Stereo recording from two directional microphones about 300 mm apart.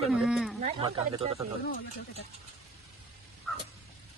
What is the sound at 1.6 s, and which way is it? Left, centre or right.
Speech, left.